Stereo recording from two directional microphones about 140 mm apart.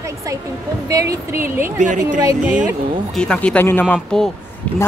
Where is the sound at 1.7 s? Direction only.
60° right (ahead or behind).